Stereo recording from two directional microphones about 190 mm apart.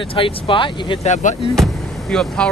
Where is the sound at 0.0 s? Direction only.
30° left (ahead or behind).